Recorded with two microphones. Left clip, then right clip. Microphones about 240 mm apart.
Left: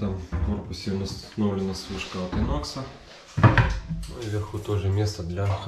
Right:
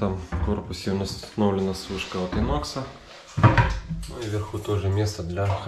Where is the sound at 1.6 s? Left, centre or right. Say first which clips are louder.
Right 3 dB; centre.